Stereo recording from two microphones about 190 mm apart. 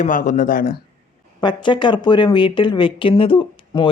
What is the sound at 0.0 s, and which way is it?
Speech, 45° left (ahead or behind).